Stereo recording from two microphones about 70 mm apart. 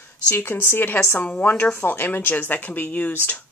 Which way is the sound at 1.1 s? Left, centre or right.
Left.